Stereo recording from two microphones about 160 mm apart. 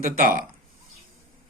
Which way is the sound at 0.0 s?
60° right (ahead or behind).